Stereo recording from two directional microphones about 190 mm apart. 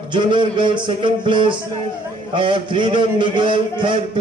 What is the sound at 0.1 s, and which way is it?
Speech, 25° right (ahead or behind).